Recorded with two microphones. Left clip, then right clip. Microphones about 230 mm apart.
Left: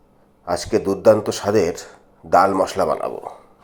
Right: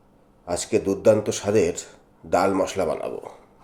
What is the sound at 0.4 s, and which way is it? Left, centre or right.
Speech, centre.